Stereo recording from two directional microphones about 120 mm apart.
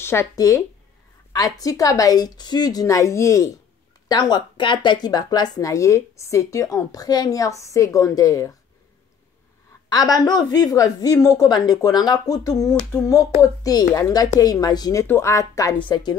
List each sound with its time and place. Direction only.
0.0 s speech: 20° left (ahead or behind)
4.1 s speech: 35° left (ahead or behind)
9.8 s a woman's voice: 30° left (ahead or behind)